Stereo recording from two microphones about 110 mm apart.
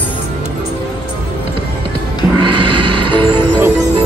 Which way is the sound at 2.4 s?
50° right (ahead or behind).